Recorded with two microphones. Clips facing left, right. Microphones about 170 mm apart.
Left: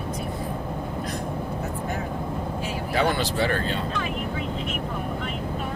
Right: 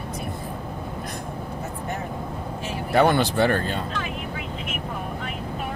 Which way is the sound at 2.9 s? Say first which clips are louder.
Right 6 dB; 55° right (ahead or behind).